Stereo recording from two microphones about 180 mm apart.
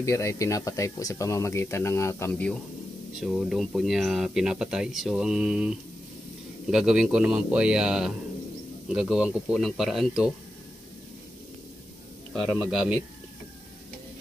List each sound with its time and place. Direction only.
0.0 s speech: 15° left (ahead or behind)
3.2 s speech: 5° right (ahead or behind)
12.4 s speech: centre (ahead or behind)